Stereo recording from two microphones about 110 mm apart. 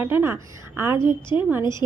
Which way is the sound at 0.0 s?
20° right (ahead or behind).